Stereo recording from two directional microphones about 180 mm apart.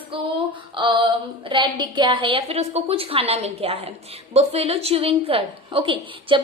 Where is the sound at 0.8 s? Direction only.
25° right (ahead or behind).